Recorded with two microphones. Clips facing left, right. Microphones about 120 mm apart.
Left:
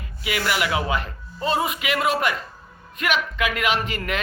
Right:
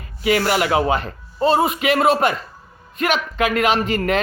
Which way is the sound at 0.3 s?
40° right (ahead or behind).